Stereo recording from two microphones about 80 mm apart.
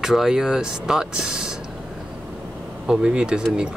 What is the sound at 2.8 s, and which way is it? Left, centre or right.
Speech, centre.